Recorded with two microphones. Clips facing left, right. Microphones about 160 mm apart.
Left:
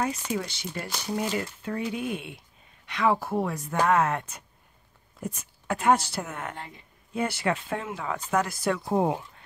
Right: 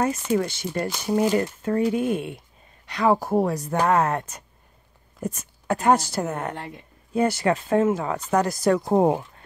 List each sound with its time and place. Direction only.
0.0 s speech: 50° right (ahead or behind)